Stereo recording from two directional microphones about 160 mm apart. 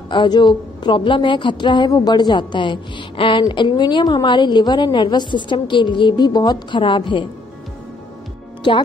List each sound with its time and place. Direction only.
0.1 s a woman's voice: 30° left (ahead or behind)